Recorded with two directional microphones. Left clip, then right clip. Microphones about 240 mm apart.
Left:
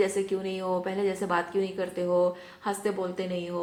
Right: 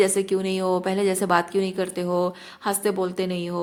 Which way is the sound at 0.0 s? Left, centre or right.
Right.